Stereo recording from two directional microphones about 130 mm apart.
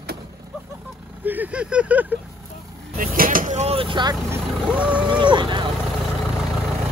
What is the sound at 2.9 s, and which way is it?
Vehicle, 90° right.